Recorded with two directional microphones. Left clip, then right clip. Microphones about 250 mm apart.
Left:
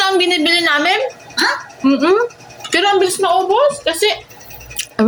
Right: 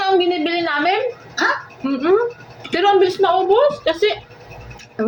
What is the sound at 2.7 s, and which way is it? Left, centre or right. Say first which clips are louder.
Speech: left 1 dB; left.